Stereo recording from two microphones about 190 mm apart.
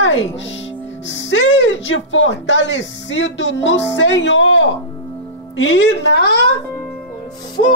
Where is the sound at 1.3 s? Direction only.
80° left.